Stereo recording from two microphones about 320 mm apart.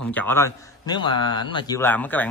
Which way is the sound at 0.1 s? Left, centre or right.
Centre.